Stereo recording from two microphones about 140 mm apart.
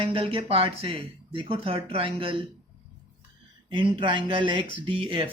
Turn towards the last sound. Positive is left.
turn(degrees=-40)  # may be behind; listen again after turning